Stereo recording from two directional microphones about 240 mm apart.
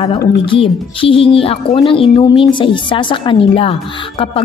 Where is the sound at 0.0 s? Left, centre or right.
Left.